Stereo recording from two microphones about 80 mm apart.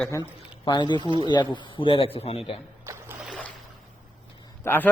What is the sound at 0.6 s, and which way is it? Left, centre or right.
A man's voice, left.